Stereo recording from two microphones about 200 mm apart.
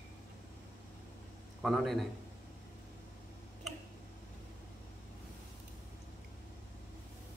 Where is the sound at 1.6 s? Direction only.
Centre (ahead or behind).